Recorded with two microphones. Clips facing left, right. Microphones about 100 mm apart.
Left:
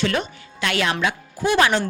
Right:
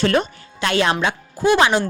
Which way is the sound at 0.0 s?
40° right (ahead or behind).